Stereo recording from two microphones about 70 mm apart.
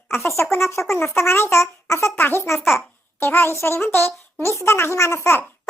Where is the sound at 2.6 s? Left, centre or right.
Centre.